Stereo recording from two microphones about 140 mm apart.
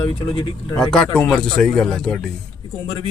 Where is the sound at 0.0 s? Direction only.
35° left (ahead or behind).